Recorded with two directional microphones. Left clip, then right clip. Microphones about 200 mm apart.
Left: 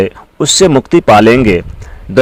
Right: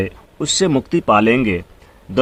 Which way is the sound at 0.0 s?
35° left (ahead or behind).